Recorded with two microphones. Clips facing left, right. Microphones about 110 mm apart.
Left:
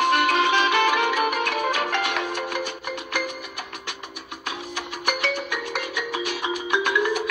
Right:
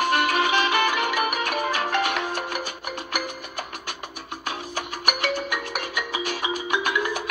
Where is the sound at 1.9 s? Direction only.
45° right (ahead or behind).